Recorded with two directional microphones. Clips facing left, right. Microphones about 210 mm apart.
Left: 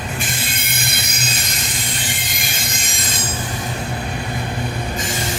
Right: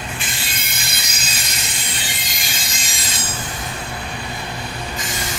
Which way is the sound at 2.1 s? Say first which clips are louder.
Left 3 dB; 55° left (ahead or behind).